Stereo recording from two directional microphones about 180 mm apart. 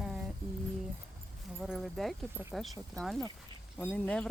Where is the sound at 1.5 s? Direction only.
5° right (ahead or behind).